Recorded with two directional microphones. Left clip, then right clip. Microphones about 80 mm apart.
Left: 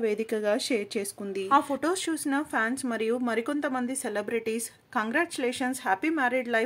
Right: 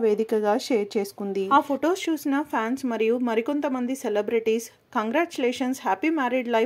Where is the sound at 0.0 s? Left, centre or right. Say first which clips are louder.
Right 5 dB; right.